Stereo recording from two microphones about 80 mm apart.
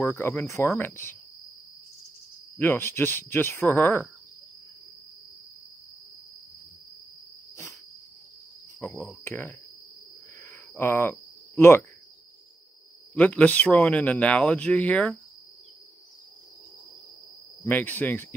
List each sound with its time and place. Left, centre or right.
0.0 s speech: left
2.6 s speech: left
8.8 s speech: left
10.8 s speech: left
13.1 s speech: centre
17.6 s speech: left